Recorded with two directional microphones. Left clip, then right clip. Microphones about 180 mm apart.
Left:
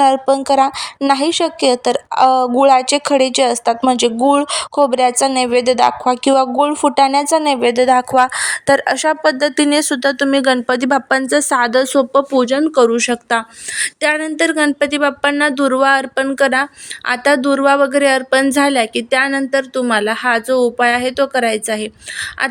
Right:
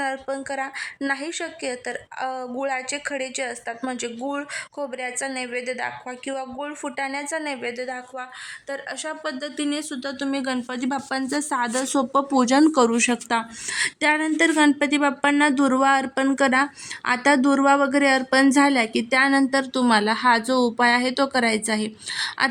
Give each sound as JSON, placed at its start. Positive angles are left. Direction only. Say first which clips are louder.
{"t": 0.0, "sound": "a woman's voice", "louder": "left 15 dB", "side_deg": 35}
{"t": 11.9, "sound": "a woman's voice", "louder": "left 8 dB", "side_deg": 25}